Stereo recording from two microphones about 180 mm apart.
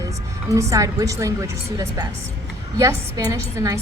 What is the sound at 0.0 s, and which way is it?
A woman's voice, 15° right (ahead or behind).